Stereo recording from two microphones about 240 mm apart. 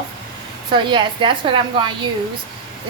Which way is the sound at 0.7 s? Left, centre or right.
Centre.